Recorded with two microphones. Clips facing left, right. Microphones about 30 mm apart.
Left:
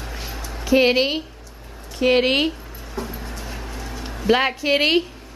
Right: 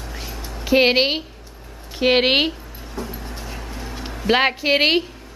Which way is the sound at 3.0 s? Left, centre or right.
Centre.